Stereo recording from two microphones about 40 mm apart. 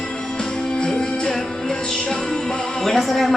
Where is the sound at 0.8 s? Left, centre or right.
Centre.